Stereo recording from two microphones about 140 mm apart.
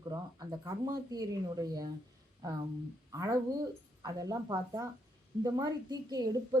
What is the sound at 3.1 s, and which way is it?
Speech, 25° right (ahead or behind).